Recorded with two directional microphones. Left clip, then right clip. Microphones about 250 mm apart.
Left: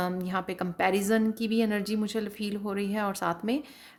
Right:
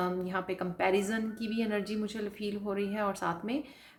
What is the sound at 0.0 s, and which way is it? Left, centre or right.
A woman's voice, left.